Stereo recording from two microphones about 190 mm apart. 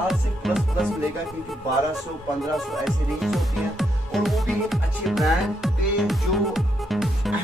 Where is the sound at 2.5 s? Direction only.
Centre (ahead or behind).